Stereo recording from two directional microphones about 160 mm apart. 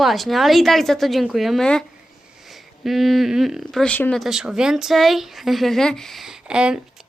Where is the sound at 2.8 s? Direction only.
Centre (ahead or behind).